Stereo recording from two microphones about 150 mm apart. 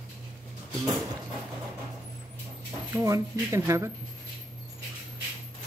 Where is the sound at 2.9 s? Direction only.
20° right (ahead or behind).